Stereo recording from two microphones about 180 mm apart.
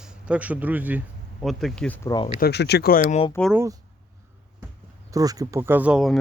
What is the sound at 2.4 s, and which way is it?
Speech, 65° left (ahead or behind).